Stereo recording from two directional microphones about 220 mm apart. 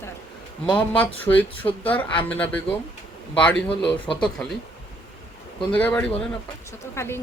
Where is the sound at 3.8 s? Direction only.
25° left (ahead or behind).